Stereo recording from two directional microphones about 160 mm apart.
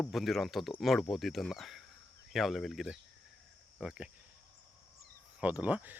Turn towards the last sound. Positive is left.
turn(degrees=-10)  # may be behind; listen again after turning